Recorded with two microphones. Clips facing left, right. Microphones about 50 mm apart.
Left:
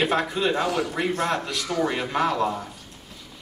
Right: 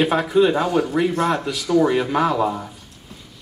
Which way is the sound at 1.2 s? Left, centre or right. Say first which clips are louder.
Right 4 dB; centre.